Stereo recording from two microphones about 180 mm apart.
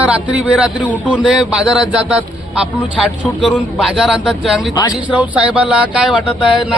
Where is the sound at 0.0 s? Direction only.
10° right (ahead or behind).